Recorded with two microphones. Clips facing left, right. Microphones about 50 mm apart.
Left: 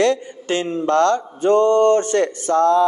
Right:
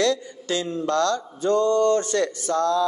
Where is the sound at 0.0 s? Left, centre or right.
Left.